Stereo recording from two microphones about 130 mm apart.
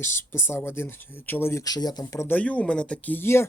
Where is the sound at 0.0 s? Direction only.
20° left (ahead or behind).